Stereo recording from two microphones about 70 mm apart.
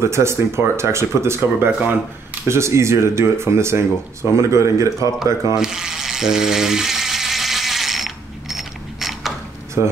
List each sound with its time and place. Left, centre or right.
0.0 s speech: right
5.6 s toothbrush: centre